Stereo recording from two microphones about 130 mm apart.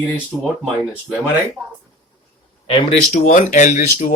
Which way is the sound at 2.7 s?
45° left (ahead or behind).